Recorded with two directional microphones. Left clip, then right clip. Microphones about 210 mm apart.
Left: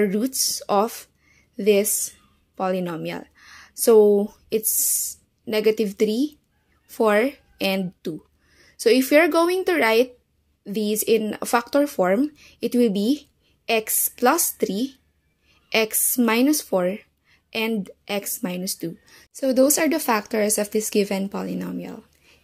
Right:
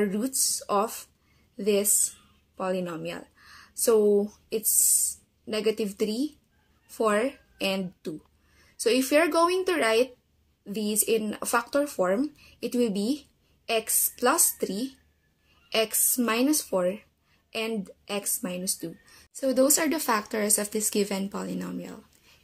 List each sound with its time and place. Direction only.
0.0 s a woman's voice: 35° left (ahead or behind)